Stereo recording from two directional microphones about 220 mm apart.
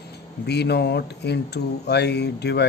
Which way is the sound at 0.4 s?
50° left (ahead or behind).